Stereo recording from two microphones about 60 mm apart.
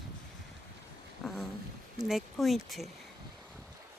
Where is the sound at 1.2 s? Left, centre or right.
Centre.